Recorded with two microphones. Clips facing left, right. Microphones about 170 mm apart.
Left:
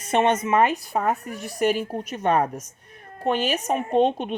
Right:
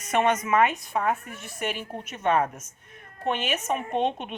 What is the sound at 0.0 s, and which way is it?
A woman's voice, 30° left (ahead or behind).